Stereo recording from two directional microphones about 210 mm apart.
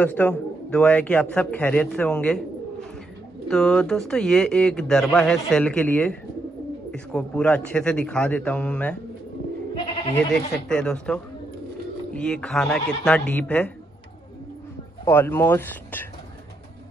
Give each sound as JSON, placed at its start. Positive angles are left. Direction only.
{"t": 0.0, "sound": "a man's voice", "side_deg": 5}
{"t": 3.4, "sound": "a man's voice", "side_deg": 5}
{"t": 10.1, "sound": "a man's voice", "side_deg": 5}
{"t": 15.0, "sound": "speech", "side_deg": 10}